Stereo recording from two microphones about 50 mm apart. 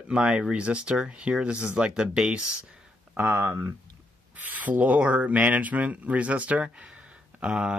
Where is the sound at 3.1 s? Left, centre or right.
Right.